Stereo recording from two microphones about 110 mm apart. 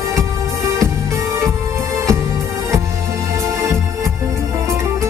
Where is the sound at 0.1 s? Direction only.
25° right (ahead or behind).